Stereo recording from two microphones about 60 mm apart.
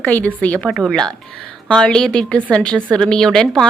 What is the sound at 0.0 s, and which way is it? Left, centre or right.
A woman's voice, left.